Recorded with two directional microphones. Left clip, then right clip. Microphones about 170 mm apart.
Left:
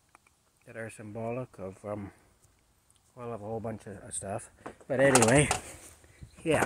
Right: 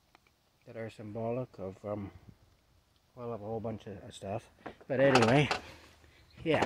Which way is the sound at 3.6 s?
Centre (ahead or behind).